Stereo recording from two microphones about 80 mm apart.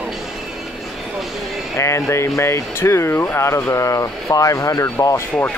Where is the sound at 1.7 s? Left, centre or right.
Left.